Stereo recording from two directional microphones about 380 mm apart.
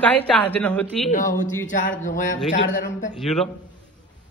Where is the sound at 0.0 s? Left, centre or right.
Centre.